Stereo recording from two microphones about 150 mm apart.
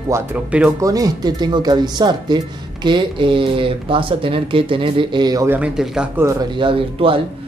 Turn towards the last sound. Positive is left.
turn(degrees=-35)  # may be behind; listen again after turning